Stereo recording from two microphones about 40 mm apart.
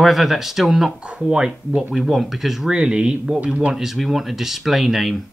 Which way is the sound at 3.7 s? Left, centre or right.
Centre.